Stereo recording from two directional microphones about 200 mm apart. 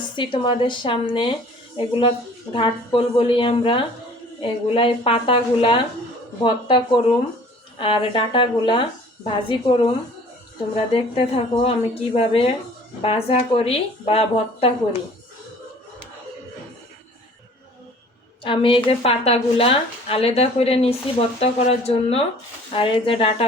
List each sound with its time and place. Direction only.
0.2 s speech: 25° left (ahead or behind)
18.4 s speech: 25° left (ahead or behind)